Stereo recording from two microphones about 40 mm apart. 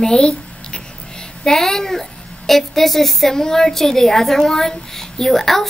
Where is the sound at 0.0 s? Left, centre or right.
Centre.